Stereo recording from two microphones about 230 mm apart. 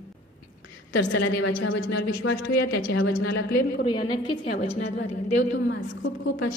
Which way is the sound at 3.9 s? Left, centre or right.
Centre.